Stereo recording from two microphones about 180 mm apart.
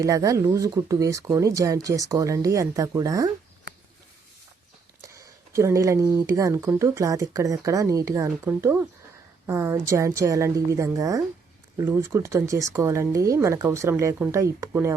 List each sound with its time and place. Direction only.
0.0 s speech: 20° right (ahead or behind)
5.0 s speech: 15° right (ahead or behind)